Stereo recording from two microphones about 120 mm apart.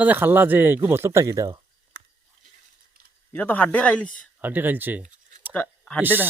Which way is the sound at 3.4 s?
15° left (ahead or behind).